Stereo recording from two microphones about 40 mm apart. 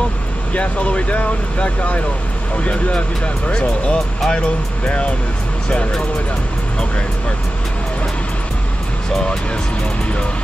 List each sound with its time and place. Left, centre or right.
0.5 s speech: left
9.1 s speech: centre